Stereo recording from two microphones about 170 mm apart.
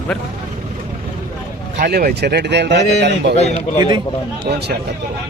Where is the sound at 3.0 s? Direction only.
80° right.